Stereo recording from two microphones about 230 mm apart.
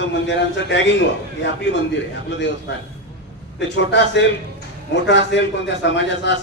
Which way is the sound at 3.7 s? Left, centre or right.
Left.